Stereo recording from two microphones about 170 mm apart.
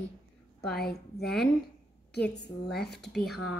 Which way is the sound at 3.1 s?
5° left (ahead or behind).